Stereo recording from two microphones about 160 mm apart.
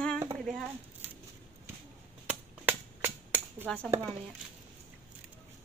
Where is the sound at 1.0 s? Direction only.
10° right (ahead or behind).